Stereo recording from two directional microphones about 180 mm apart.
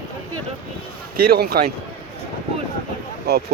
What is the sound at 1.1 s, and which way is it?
Speech, 55° right (ahead or behind).